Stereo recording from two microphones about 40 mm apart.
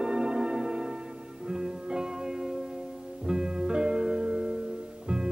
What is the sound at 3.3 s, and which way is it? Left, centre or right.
Music, right.